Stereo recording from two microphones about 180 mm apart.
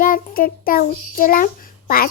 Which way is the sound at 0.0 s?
50° left (ahead or behind).